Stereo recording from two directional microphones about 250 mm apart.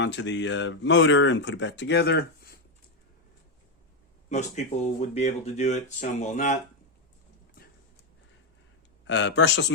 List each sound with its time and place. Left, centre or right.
0.0 s speech: left
4.3 s speech: left
9.0 s speech: left